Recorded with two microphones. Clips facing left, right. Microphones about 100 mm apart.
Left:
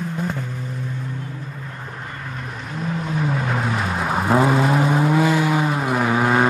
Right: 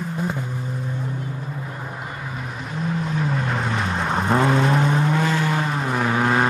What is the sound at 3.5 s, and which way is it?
Vehicle, centre (ahead or behind).